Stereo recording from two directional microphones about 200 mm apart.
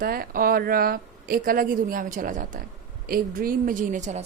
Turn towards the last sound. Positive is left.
turn(degrees=-35)  # may be behind; listen again after turning